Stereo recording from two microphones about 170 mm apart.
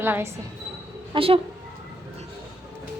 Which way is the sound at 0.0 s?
15° right (ahead or behind).